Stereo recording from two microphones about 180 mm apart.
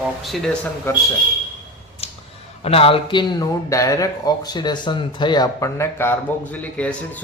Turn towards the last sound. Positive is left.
turn(degrees=10)  # may be behind; listen again after turning